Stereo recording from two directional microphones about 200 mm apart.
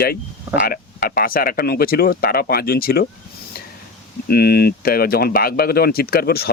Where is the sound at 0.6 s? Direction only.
45° left (ahead or behind).